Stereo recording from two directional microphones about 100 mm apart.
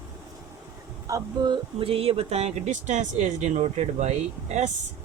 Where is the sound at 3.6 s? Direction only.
90° right.